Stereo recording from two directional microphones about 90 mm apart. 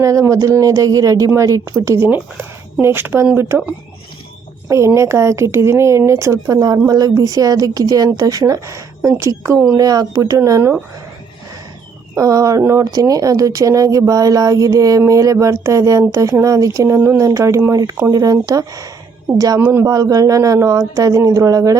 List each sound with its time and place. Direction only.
0.0 s speech: 35° right (ahead or behind)
4.9 s speech: 30° right (ahead or behind)
6.8 s speech: 45° right (ahead or behind); by 10.8 s 30° right (ahead or behind)
12.1 s speech: 40° right (ahead or behind)
19.5 s speech: 25° right (ahead or behind)
19.9 s speech: 40° right (ahead or behind)